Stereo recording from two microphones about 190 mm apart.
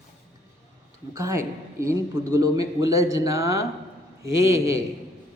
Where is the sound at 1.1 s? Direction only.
15° right (ahead or behind).